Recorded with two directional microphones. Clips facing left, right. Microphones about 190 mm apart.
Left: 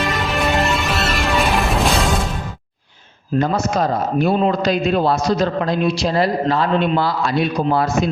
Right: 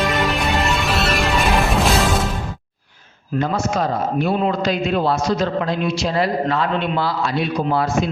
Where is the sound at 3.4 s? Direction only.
40° left (ahead or behind).